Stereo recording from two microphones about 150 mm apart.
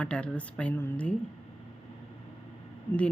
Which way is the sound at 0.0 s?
5° left (ahead or behind).